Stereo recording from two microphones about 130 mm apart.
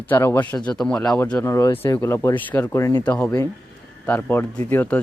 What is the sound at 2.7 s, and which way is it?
Speech, 25° left (ahead or behind).